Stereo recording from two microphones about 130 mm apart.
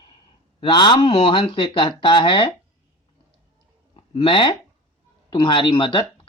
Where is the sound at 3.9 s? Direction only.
45° left (ahead or behind).